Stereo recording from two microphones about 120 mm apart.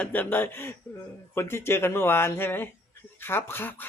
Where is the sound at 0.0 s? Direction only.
15° left (ahead or behind).